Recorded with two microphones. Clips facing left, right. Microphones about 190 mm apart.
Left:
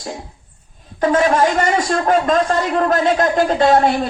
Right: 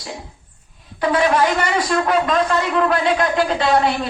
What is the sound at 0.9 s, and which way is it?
A man's voice, 45° left (ahead or behind).